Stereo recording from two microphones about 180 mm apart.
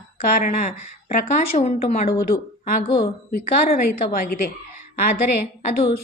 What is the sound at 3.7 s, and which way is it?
Speech, 55° left (ahead or behind).